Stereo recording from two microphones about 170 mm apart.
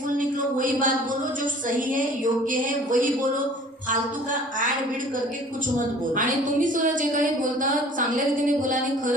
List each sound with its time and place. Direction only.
0.2 s a sound: 50° right (ahead or behind)
1.9 s a woman's voice: 50° right (ahead or behind)
6.1 s a woman's voice: 50° right (ahead or behind)